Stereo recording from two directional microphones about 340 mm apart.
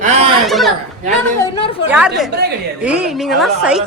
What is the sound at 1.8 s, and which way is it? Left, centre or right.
A woman's voice, centre.